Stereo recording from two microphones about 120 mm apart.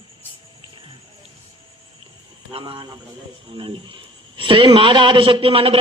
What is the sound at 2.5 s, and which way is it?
A man's voice, 50° right (ahead or behind).